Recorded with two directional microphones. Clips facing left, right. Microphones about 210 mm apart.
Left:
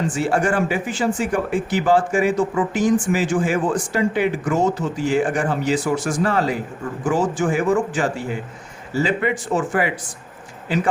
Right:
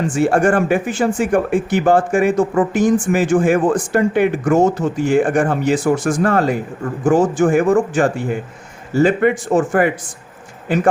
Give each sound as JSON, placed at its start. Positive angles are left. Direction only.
{"t": 0.1, "sound": "speech", "side_deg": -50}